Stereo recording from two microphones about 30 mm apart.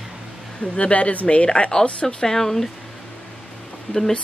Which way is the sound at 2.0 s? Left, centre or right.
Centre.